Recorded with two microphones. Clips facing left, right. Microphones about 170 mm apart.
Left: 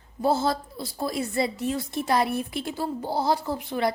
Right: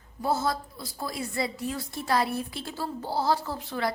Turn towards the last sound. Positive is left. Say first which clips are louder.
# left 4 dB
turn(degrees=15)  # may be behind; listen again after turning